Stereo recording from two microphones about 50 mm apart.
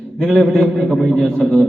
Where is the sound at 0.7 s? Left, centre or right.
Centre.